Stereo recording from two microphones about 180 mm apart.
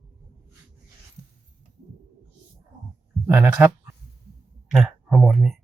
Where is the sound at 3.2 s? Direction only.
15° right (ahead or behind).